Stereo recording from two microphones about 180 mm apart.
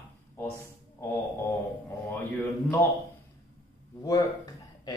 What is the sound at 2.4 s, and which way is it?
Speech, 10° left (ahead or behind).